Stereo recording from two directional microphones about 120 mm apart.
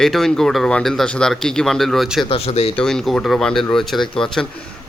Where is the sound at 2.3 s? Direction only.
60° left (ahead or behind).